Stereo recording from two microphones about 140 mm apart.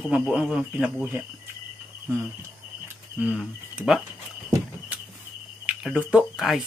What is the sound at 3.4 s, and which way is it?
Speech, 5° right (ahead or behind).